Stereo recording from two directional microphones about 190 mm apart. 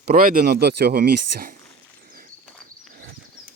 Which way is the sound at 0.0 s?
50° right (ahead or behind).